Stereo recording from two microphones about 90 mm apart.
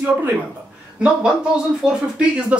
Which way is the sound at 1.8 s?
10° right (ahead or behind).